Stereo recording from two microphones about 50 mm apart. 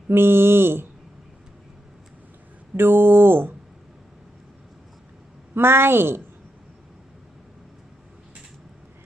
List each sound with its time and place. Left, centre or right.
0.1 s speech: right
2.7 s speech: right
5.5 s speech: right